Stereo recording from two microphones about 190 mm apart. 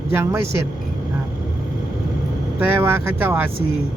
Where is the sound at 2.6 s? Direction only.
10° right (ahead or behind).